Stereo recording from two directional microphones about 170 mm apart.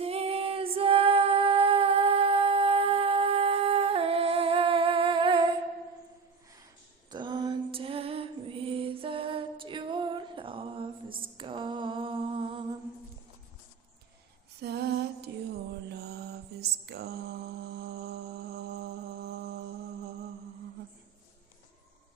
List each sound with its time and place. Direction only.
0.0 s female singing: 35° right (ahead or behind)
7.1 s music: 25° right (ahead or behind)
11.3 s mantra: 30° right (ahead or behind)
14.6 s female singing: 75° right (ahead or behind)
15.9 s mantra: 70° right (ahead or behind)